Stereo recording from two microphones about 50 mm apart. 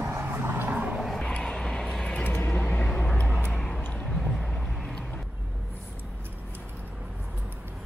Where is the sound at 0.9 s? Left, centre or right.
Centre.